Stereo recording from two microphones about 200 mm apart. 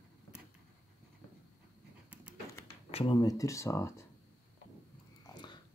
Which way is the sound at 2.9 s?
25° left (ahead or behind).